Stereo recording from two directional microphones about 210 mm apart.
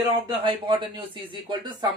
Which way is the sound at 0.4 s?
25° right (ahead or behind).